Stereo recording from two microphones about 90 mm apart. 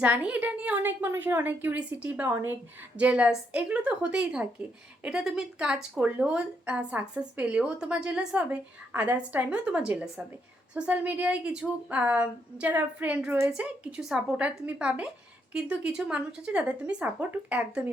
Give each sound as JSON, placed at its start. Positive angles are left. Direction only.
{"t": 0.0, "sound": "a woman's voice", "side_deg": -15}
{"t": 2.3, "sound": "a woman's voice", "side_deg": -25}
{"t": 2.9, "sound": "speech", "side_deg": -15}
{"t": 14.0, "sound": "a woman's voice", "side_deg": -5}
{"t": 14.7, "sound": "speech", "side_deg": -15}